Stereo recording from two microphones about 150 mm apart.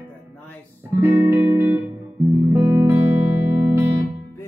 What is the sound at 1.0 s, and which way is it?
Music, 15° right (ahead or behind).